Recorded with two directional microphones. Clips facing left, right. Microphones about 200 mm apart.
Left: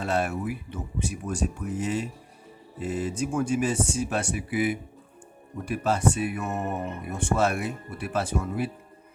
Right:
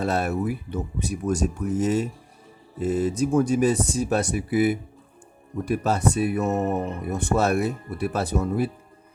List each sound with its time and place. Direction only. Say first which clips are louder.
0.0 s speech: right 3 dB; 40° right (ahead or behind)